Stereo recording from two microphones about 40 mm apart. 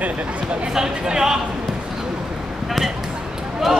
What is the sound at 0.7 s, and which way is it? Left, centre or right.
Speech, centre.